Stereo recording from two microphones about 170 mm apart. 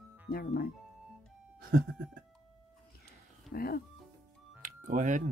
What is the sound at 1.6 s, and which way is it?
Music, 55° right (ahead or behind).